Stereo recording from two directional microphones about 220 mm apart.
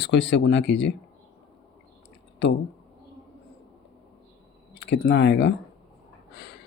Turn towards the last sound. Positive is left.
turn(degrees=50)  # may be behind; listen again after turning